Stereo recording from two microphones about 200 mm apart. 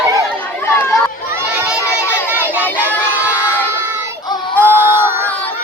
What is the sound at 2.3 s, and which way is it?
Child singing, 10° right (ahead or behind).